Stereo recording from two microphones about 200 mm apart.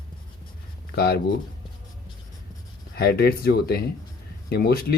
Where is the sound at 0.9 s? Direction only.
50° left (ahead or behind).